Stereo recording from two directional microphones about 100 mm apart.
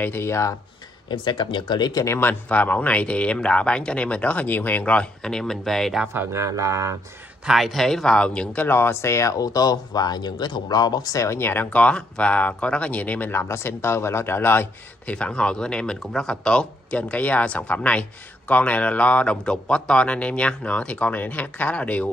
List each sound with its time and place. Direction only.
0.0 s speech: 25° left (ahead or behind)
1.0 s speech: 50° left (ahead or behind)
2.0 s speech: 20° left (ahead or behind); by 6.0 s centre (ahead or behind)
6.1 s speech: 30° right (ahead or behind)
7.4 s speech: 5° right (ahead or behind)
8.6 s speech: 20° left (ahead or behind); by 11.2 s 40° left (ahead or behind)
11.2 s speech: 25° left (ahead or behind)